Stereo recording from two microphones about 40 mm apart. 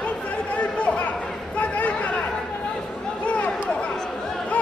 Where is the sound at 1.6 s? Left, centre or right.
Left.